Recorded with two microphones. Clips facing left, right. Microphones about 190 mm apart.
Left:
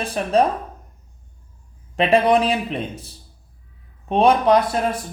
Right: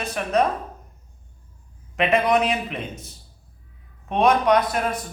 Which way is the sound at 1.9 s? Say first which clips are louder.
Left 3 dB; 30° left (ahead or behind).